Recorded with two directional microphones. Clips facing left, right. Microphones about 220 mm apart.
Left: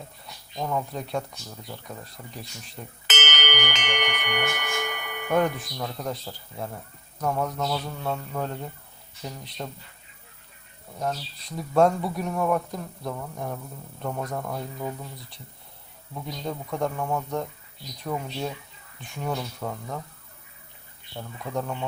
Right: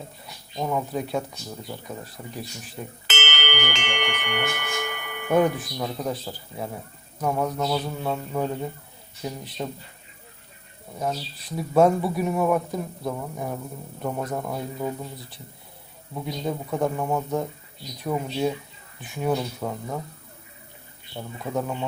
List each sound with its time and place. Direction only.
0.5 s speech: 5° right (ahead or behind)
3.1 s speech: 20° left (ahead or behind)
5.3 s speech: 10° right (ahead or behind)
10.9 s speech: 5° right (ahead or behind)
21.2 s speech: 10° right (ahead or behind)